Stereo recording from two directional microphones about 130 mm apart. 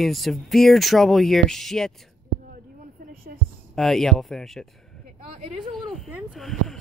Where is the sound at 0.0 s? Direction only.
Centre (ahead or behind).